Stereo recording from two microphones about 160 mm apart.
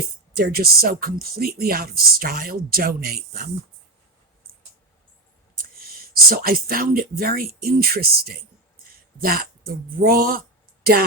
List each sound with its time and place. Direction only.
0.3 s speech: 75° right (ahead or behind)
5.9 s speech: 65° right (ahead or behind)